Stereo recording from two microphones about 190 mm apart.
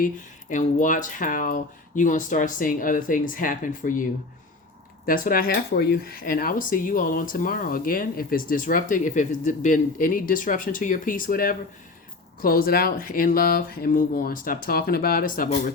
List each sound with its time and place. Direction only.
0.5 s speech: 45° left (ahead or behind)
5.0 s speech: 50° left (ahead or behind)